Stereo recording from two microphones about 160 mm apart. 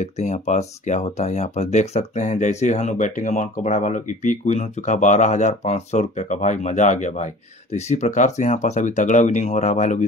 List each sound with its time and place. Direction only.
0.0 s speech: 45° left (ahead or behind)